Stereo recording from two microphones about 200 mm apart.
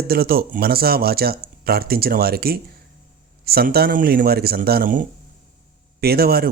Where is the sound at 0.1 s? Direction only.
50° right (ahead or behind).